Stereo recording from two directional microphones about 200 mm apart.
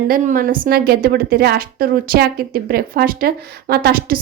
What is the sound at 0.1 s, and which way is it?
A woman's voice, 45° right (ahead or behind).